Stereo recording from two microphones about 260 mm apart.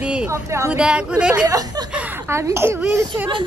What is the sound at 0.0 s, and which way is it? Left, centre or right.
Speech, centre.